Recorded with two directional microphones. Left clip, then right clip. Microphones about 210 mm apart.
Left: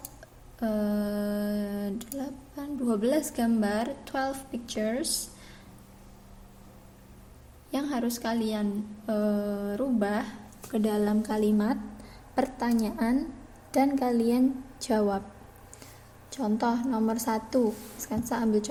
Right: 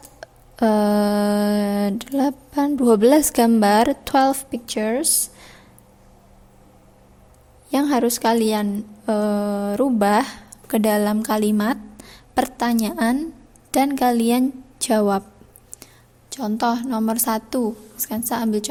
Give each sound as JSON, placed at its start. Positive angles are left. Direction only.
{"t": 0.2, "sound": "a sound", "side_deg": -45}
{"t": 7.7, "sound": "a woman's voice", "side_deg": -40}
{"t": 14.2, "sound": "a woman's voice", "side_deg": -90}
{"t": 14.9, "sound": "a woman's voice", "side_deg": -50}
{"t": 16.7, "sound": "a woman's voice", "side_deg": -90}
{"t": 17.0, "sound": "a woman's voice", "side_deg": -55}